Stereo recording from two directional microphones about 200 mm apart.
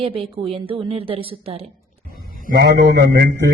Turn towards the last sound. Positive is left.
turn(degrees=-55)  # may be behind; listen again after turning